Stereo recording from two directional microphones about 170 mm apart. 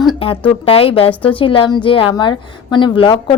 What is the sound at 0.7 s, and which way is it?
Speech, 35° left (ahead or behind).